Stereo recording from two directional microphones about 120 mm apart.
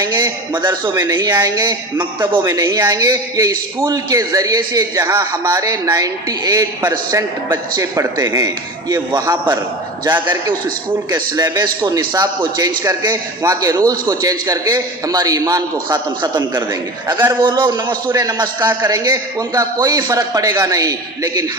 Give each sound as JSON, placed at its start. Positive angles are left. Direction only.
{"t": 0.6, "sound": "a man's voice", "side_deg": -40}
{"t": 11.1, "sound": "a man's voice", "side_deg": -30}
{"t": 17.8, "sound": "a man's voice", "side_deg": -25}
{"t": 18.8, "sound": "a man's voice", "side_deg": -30}